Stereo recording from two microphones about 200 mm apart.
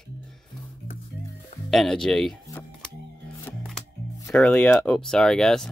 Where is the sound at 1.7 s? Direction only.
Centre (ahead or behind).